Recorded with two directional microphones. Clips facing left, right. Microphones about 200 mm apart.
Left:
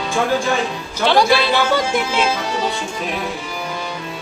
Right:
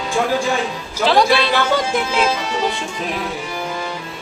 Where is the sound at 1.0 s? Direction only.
Centre (ahead or behind).